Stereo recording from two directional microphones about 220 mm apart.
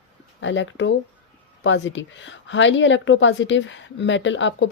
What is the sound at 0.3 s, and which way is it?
A woman's voice, 55° left (ahead or behind).